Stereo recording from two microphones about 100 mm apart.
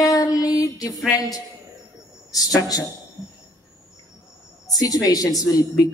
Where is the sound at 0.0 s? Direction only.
35° left (ahead or behind).